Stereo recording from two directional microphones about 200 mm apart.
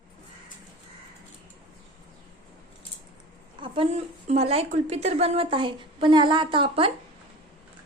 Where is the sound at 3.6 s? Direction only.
25° right (ahead or behind).